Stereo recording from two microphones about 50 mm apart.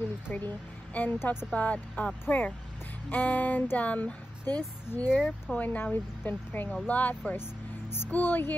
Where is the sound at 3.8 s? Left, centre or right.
Left.